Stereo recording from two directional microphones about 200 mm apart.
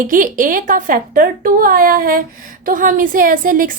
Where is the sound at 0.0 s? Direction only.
40° right (ahead or behind).